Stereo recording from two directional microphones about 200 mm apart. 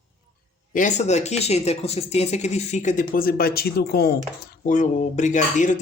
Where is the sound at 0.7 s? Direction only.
40° left (ahead or behind).